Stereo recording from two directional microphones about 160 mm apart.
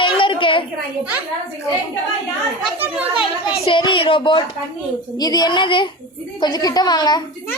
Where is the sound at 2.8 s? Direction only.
10° right (ahead or behind).